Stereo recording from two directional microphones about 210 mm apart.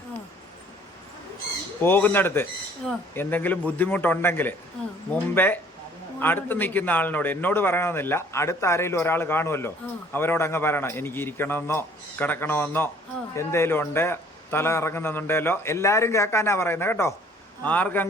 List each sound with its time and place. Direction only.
1.8 s a man's voice: 10° left (ahead or behind)